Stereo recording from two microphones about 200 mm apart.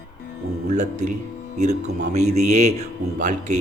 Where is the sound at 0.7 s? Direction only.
35° right (ahead or behind).